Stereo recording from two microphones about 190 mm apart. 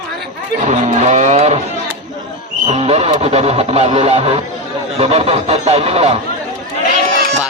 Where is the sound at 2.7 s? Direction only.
35° right (ahead or behind).